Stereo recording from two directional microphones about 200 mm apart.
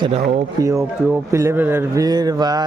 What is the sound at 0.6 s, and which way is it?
Speech, 15° right (ahead or behind).